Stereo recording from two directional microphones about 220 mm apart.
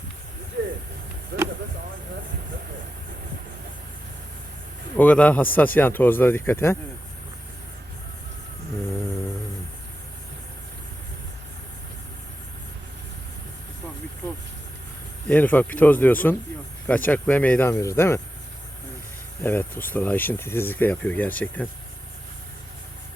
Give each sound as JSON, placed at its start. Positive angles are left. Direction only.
{"t": 0.6, "sound": "a sound", "side_deg": -50}
{"t": 4.9, "sound": "speech", "side_deg": 5}
{"t": 15.3, "sound": "speech", "side_deg": 10}
{"t": 19.4, "sound": "speech", "side_deg": 10}